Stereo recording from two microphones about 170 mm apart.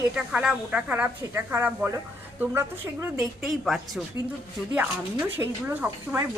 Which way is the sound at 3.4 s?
Centre (ahead or behind).